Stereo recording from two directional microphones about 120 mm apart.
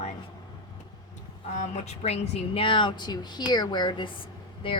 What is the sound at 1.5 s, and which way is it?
Speech, 75° left (ahead or behind).